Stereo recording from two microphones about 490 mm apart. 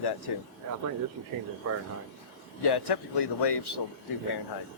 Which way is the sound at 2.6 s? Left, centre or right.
Left.